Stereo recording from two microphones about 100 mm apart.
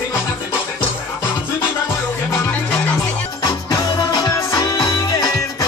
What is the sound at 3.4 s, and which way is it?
Music, 45° left (ahead or behind).